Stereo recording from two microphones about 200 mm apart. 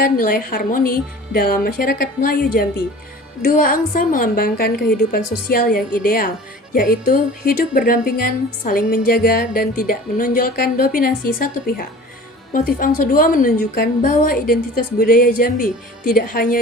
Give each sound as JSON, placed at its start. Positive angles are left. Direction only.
{"t": 0.0, "sound": "speech", "side_deg": 45}